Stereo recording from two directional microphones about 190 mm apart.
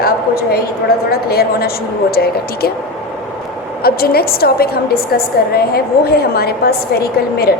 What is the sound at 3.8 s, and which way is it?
A woman's voice, 55° left (ahead or behind).